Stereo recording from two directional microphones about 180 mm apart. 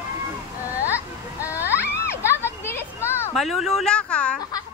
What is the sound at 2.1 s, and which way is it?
Children playing, 15° left (ahead or behind).